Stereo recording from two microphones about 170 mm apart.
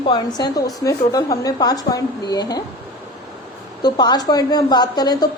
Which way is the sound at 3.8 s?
25° left (ahead or behind).